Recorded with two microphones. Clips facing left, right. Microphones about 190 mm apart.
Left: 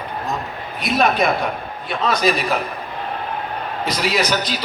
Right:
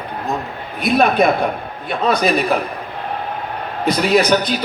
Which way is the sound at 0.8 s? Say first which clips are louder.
Right 4 dB; 55° right (ahead or behind).